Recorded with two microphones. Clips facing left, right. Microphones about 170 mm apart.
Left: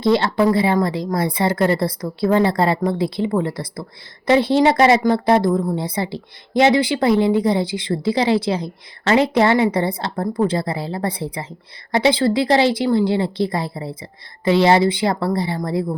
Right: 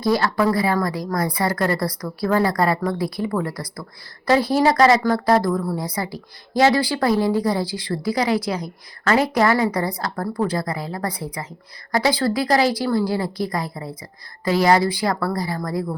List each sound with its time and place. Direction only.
0.0 s a woman's voice: 25° left (ahead or behind)